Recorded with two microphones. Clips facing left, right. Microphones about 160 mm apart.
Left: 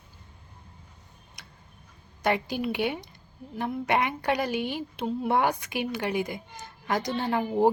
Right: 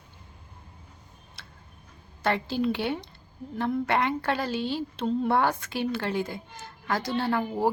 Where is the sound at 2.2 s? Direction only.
15° left (ahead or behind).